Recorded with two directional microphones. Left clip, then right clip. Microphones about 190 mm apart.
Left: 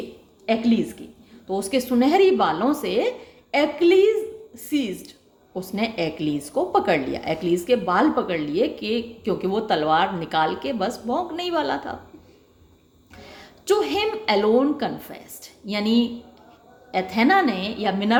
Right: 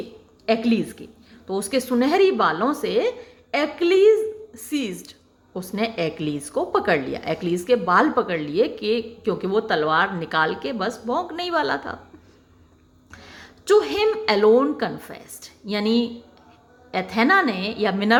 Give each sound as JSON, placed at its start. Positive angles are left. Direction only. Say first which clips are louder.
{"t": 0.4, "sound": "a woman's voice", "louder": "right 1 dB", "side_deg": -20}
{"t": 13.1, "sound": "a woman's voice", "louder": "even", "side_deg": -10}